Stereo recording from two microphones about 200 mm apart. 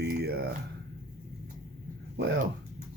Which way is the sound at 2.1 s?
55° right (ahead or behind).